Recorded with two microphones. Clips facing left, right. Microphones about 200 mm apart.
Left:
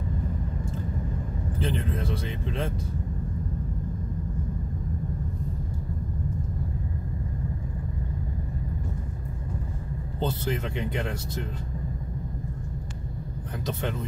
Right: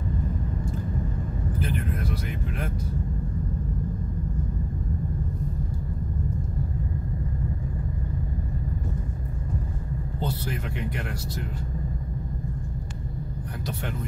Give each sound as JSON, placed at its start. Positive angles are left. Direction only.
{"t": 1.6, "sound": "speech", "side_deg": 25}
{"t": 10.2, "sound": "speech", "side_deg": 25}